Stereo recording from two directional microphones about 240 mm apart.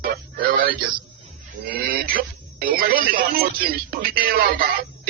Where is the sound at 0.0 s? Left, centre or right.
Right.